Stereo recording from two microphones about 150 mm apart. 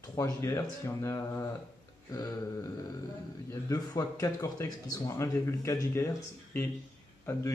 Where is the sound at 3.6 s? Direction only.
25° left (ahead or behind).